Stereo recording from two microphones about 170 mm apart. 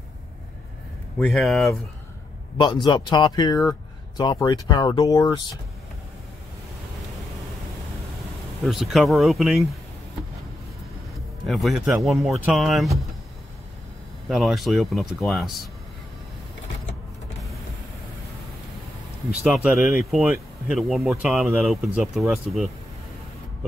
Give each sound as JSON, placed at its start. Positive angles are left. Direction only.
{"t": 1.2, "sound": "speech", "side_deg": 0}
{"t": 2.5, "sound": "speech", "side_deg": 25}
{"t": 8.6, "sound": "speech", "side_deg": 0}
{"t": 11.4, "sound": "speech", "side_deg": 0}
{"t": 14.3, "sound": "speech", "side_deg": 0}
{"t": 19.4, "sound": "speech", "side_deg": -5}